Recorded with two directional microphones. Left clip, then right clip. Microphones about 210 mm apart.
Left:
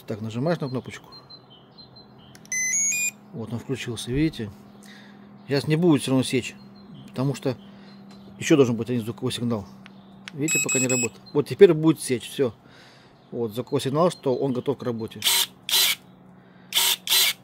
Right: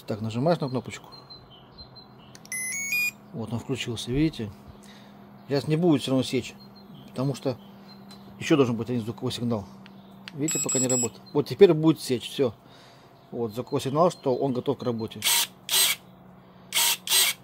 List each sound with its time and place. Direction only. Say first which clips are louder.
0.0 s speech: right 1 dB; centre (ahead or behind)
2.5 s a sound: left 5 dB; 10° left (ahead or behind)
3.3 s speech: even; centre (ahead or behind)
5.5 s speech: left 2 dB; 20° left (ahead or behind)
16.7 s camera: left 2 dB; 10° left (ahead or behind)